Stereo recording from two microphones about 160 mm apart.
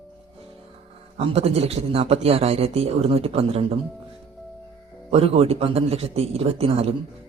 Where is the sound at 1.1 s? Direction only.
40° right (ahead or behind).